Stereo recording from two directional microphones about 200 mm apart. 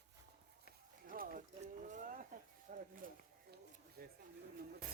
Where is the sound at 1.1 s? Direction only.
45° right (ahead or behind).